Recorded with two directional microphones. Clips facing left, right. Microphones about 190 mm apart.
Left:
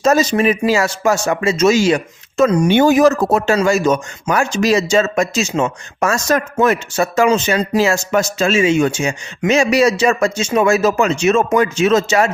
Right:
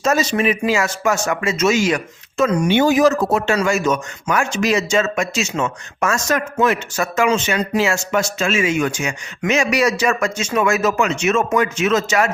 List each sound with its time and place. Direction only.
0.0 s speech: 40° left (ahead or behind)
2.4 s speech: 45° left (ahead or behind); by 12.3 s 30° left (ahead or behind)